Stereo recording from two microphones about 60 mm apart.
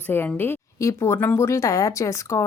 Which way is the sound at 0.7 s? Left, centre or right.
Left.